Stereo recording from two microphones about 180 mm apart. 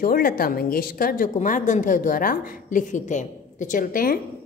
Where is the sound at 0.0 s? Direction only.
55° left (ahead or behind).